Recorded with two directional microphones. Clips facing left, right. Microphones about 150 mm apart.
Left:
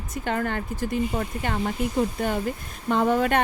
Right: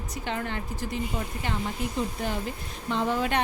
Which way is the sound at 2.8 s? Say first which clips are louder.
Left 5 dB; 50° left (ahead or behind).